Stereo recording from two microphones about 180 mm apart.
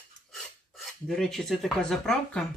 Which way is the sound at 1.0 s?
Centre (ahead or behind).